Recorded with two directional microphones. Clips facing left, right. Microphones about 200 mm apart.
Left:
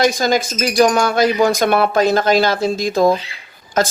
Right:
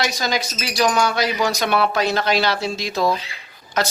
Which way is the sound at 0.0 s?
50° left (ahead or behind).